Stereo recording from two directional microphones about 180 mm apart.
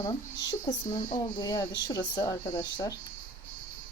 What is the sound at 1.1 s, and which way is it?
A woman's voice, 20° left (ahead or behind).